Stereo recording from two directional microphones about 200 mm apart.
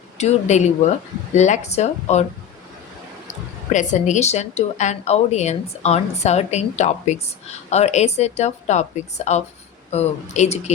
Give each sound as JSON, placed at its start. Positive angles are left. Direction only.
{"t": 0.2, "sound": "a woman's voice", "side_deg": 35}
{"t": 3.7, "sound": "a woman's voice", "side_deg": 35}